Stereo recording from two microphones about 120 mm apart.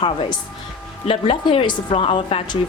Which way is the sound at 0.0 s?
45° left (ahead or behind).